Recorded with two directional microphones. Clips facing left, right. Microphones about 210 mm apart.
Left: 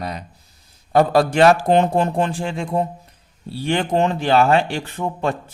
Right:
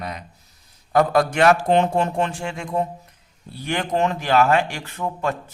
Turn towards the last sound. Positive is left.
turn(degrees=30)  # may be behind; listen again after turning